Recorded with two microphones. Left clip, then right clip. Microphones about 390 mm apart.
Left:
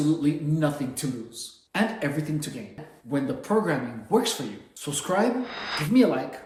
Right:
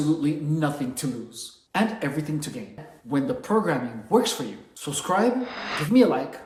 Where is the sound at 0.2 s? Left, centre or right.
Centre.